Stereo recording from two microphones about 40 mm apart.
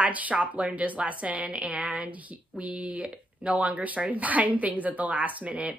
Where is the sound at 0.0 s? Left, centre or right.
Right.